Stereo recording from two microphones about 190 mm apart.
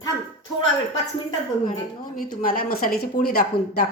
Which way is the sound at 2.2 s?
45° left (ahead or behind).